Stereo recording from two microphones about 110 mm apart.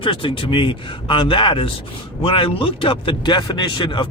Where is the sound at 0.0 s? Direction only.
50° left (ahead or behind).